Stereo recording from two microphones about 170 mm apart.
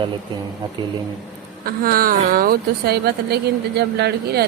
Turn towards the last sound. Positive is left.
turn(degrees=-75)  # may be behind; listen again after turning